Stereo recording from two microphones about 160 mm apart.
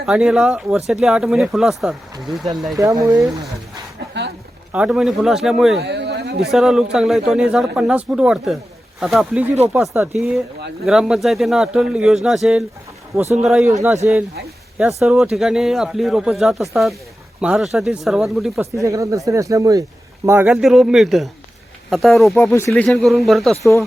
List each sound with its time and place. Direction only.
0.0 s speech: 5° right (ahead or behind)
2.7 s speech: 25° right (ahead or behind)
3.1 s speech: centre (ahead or behind)
4.7 s speech: 5° right (ahead or behind)
5.8 s a sound: 90° right
6.5 s speech: centre (ahead or behind)
13.8 s speech: 20° right (ahead or behind)
15.0 s speech: centre (ahead or behind)
18.6 s a man's voice: 20° right (ahead or behind)
20.5 s speech: centre (ahead or behind)
22.4 s speech: 15° left (ahead or behind); by 23.6 s centre (ahead or behind)